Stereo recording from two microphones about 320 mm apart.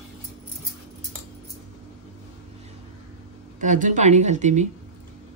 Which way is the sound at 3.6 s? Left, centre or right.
Right.